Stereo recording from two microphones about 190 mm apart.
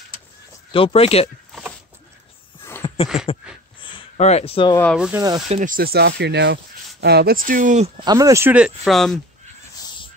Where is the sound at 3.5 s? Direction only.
5° right (ahead or behind).